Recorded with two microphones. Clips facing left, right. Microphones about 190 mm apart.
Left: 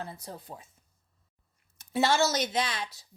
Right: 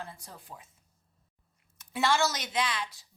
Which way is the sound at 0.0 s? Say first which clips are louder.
Left 4 dB; 40° left (ahead or behind).